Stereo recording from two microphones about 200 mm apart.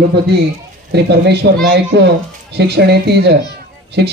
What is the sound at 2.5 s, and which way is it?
Speech, 55° right (ahead or behind).